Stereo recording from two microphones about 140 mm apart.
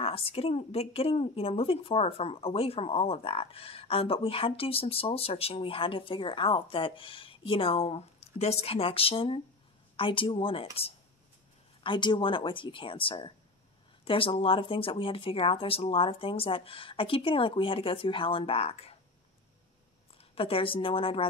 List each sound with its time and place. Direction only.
0.0 s a woman's voice: 45° left (ahead or behind)
20.3 s speech: 40° left (ahead or behind)